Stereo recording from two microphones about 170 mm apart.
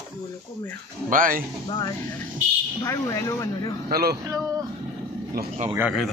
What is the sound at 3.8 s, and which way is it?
Speech, 65° right (ahead or behind).